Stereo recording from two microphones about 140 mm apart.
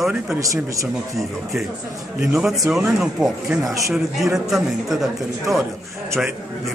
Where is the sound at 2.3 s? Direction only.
5° right (ahead or behind).